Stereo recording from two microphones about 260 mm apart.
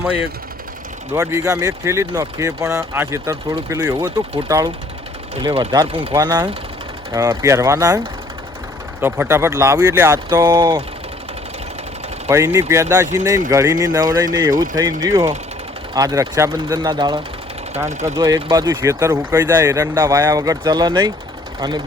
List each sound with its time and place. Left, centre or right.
1.1 s speech: centre
12.3 s speech: centre
14.5 s speech: right
14.8 s speech: centre